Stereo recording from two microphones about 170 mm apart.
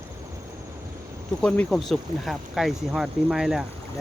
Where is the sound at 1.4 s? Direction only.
5° left (ahead or behind).